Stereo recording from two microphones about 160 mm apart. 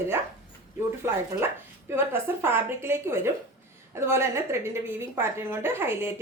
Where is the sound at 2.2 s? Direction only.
15° right (ahead or behind).